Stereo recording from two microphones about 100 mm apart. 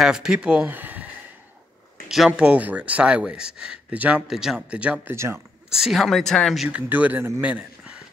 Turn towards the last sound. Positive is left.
turn(degrees=-10)  # may be behind; listen again after turning